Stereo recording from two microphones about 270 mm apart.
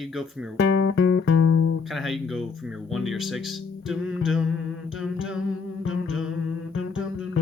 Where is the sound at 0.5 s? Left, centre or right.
Left.